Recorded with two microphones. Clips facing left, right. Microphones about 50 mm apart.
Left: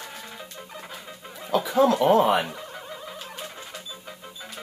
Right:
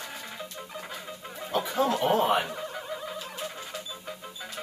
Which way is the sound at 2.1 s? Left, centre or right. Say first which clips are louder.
Left 4 dB; left.